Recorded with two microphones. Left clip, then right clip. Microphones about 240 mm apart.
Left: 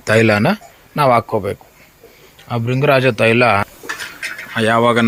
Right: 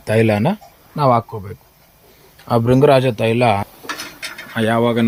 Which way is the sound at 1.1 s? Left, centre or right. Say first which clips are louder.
Left 4 dB; left.